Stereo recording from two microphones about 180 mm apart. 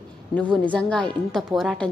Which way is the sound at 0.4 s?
5° left (ahead or behind).